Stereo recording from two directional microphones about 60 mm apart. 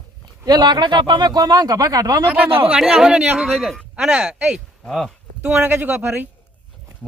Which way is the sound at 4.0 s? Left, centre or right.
Centre.